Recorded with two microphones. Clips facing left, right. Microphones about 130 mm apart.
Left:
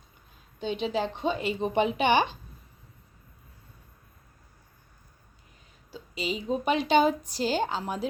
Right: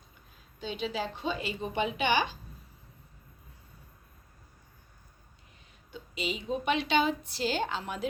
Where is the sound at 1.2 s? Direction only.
50° left (ahead or behind).